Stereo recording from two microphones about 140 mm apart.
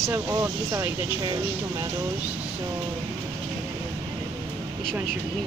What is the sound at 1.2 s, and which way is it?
Speech, 30° right (ahead or behind).